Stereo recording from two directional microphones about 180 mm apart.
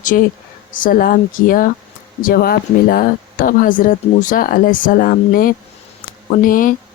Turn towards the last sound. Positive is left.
turn(degrees=50)  # may be behind; listen again after turning